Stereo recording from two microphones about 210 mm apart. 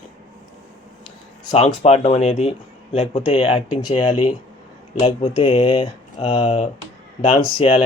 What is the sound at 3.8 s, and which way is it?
Speech, 90° left.